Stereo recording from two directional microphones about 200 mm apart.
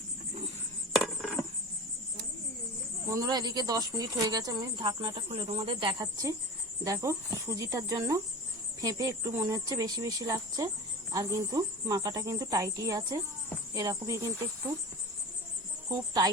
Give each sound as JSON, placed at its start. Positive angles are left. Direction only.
{"t": 0.9, "sound": "insect", "side_deg": 0}
{"t": 3.1, "sound": "speech", "side_deg": -20}